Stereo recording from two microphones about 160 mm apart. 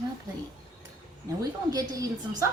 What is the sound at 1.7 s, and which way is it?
Speech, 20° right (ahead or behind).